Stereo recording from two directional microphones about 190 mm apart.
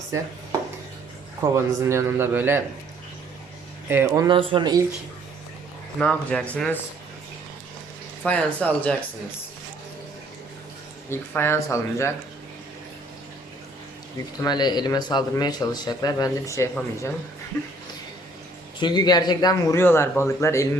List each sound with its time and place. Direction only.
1.5 s a man's voice: 15° right (ahead or behind)
3.8 s speech: 15° right (ahead or behind)
6.0 s speech: 5° left (ahead or behind)
8.2 s speech: 5° left (ahead or behind)
11.1 s speech: 10° left (ahead or behind)
14.4 s a man's voice: 20° left (ahead or behind)
18.8 s a man's voice: 25° left (ahead or behind)